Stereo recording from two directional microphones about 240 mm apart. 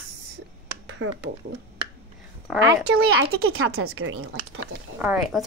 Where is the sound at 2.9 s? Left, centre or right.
Right.